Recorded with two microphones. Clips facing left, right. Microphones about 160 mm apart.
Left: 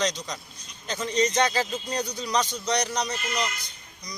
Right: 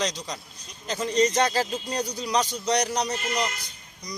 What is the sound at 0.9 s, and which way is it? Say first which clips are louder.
Speech: right 2 dB; 5° right (ahead or behind).